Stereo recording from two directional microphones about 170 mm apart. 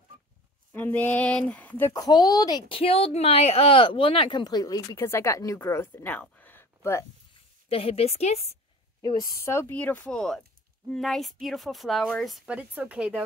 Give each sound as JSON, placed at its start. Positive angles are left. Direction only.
{"t": 0.7, "sound": "speech", "side_deg": 10}
{"t": 2.0, "sound": "a woman's voice", "side_deg": 25}
{"t": 7.7, "sound": "a woman's voice", "side_deg": 35}
{"t": 9.4, "sound": "speech", "side_deg": 15}